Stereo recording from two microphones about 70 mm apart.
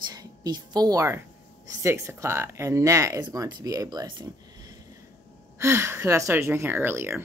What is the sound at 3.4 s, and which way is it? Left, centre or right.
Speech, right.